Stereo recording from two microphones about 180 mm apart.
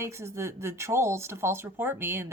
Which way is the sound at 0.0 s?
15° right (ahead or behind).